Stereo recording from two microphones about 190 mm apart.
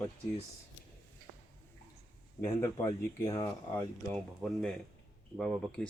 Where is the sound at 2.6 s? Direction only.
20° left (ahead or behind).